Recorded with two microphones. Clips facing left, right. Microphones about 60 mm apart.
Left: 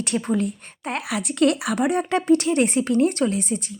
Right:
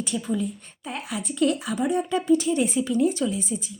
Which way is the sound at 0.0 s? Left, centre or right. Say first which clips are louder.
Left 4 dB; left.